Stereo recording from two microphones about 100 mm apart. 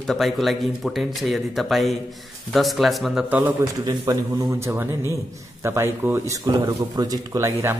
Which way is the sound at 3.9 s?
40° right (ahead or behind).